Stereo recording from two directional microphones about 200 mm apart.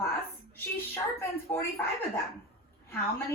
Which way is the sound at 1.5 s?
10° left (ahead or behind).